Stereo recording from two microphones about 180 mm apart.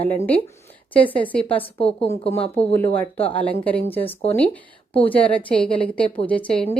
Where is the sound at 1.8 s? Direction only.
35° left (ahead or behind).